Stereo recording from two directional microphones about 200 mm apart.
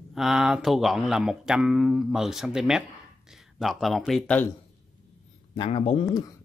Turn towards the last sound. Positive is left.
turn(degrees=30)  # may be behind; listen again after turning